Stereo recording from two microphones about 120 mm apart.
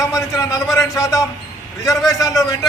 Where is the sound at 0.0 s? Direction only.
25° left (ahead or behind).